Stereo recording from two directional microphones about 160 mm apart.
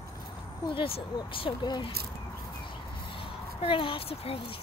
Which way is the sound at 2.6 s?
35° left (ahead or behind).